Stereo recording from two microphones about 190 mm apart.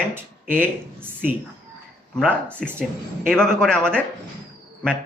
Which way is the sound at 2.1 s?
5° left (ahead or behind).